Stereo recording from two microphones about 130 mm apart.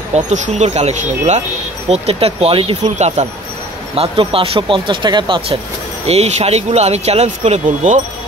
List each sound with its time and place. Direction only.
0.1 s speech: 60° right (ahead or behind); by 2.8 s 45° right (ahead or behind)
2.8 s speech: 60° right (ahead or behind)
3.9 s speech: 45° right (ahead or behind)
6.0 s speech: 55° right (ahead or behind)